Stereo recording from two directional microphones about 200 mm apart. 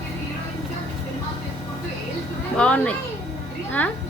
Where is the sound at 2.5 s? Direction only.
5° left (ahead or behind).